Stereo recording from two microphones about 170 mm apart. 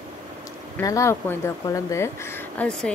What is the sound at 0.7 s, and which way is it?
Speech, 15° left (ahead or behind).